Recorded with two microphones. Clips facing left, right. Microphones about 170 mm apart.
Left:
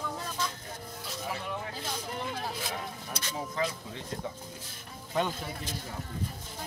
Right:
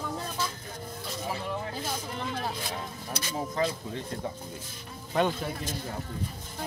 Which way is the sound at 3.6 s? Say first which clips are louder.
Right 4 dB; 40° right (ahead or behind).